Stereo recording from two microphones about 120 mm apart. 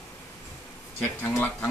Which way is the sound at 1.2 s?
20° left (ahead or behind).